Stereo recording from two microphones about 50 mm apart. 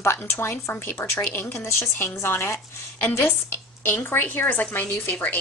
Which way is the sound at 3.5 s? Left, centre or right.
Left.